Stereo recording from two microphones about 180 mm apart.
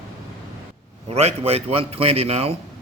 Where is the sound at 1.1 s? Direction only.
35° right (ahead or behind).